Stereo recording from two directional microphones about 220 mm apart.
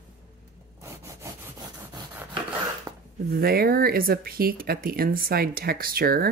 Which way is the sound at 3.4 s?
45° right (ahead or behind).